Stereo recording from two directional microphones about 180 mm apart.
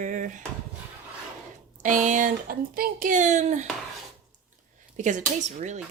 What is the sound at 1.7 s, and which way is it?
Speech, 45° right (ahead or behind).